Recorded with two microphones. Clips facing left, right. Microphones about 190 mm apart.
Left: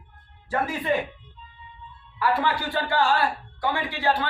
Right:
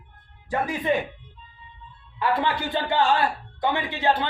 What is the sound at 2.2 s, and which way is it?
A man's voice, 20° right (ahead or behind).